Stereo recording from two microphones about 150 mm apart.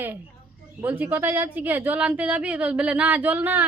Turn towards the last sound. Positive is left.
turn(degrees=-10)  # may be behind; listen again after turning